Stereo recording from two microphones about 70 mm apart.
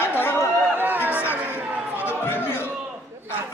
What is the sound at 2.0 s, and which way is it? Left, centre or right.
Chatter, left.